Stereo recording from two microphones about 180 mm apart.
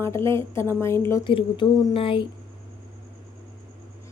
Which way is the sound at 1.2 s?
30° left (ahead or behind).